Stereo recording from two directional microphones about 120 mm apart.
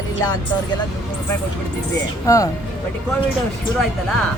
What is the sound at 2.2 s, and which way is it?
Speech, 25° left (ahead or behind).